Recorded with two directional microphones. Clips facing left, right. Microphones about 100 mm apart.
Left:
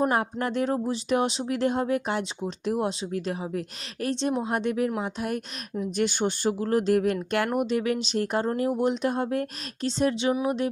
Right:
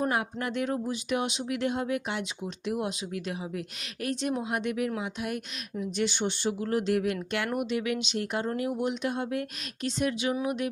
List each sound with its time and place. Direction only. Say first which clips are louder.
0.1 s speech: left 4 dB; 35° left (ahead or behind)
10.4 s music: left 4 dB; 30° left (ahead or behind)